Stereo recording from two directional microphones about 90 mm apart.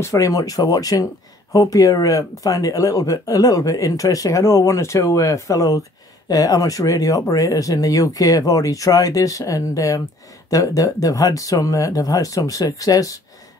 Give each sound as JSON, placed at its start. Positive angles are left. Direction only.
{"t": 0.0, "sound": "speech", "side_deg": 40}